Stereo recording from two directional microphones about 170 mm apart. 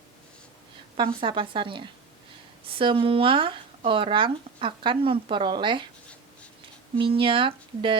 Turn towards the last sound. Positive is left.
turn(degrees=-30)  # may be behind; listen again after turning